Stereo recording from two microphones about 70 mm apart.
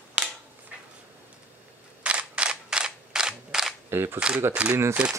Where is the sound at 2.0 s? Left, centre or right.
Centre.